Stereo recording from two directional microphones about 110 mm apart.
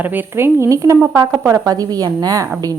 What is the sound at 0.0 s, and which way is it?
A woman's voice, 15° right (ahead or behind).